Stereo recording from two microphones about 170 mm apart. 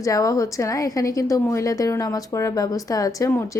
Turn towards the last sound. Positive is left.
turn(degrees=15)  # may be behind; listen again after turning